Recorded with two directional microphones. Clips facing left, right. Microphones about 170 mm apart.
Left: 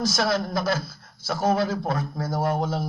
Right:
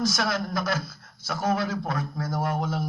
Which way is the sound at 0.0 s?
30° left (ahead or behind).